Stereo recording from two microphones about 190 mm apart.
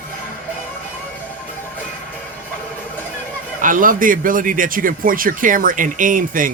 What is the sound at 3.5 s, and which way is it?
A man's voice, 45° right (ahead or behind).